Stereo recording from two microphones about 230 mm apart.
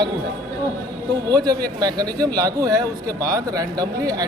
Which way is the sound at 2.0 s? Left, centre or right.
Centre.